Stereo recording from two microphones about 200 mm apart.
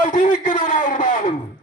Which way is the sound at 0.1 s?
40° left (ahead or behind).